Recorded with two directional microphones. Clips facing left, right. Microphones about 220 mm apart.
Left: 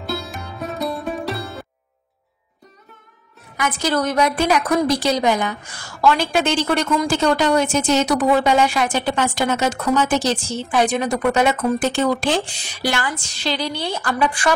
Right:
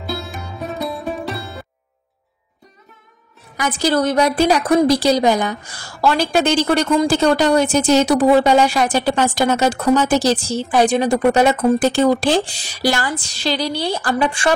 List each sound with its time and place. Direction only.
0.0 s music: centre (ahead or behind)
3.5 s a woman's voice: 30° right (ahead or behind)